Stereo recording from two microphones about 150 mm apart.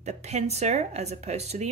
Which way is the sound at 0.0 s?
45° right (ahead or behind).